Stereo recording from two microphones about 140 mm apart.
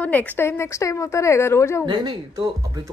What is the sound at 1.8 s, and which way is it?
Speech, 35° right (ahead or behind).